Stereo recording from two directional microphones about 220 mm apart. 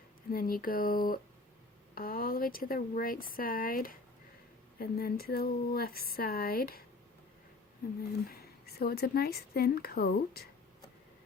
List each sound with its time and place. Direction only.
0.3 s a woman's voice: 40° left (ahead or behind)
8.3 s a woman's voice: 45° left (ahead or behind)